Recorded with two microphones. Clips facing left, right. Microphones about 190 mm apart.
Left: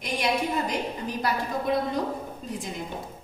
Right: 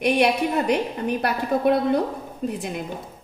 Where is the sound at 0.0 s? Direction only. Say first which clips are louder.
Right 7 dB; 65° right (ahead or behind).